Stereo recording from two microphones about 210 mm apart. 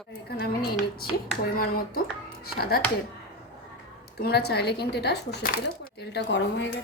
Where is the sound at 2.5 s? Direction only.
45° left (ahead or behind).